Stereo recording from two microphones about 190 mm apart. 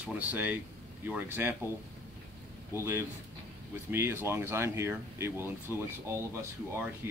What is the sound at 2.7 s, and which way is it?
Speech, 15° right (ahead or behind).